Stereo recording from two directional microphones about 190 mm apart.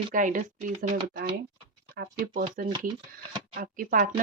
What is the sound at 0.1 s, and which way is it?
A woman's voice, 45° right (ahead or behind).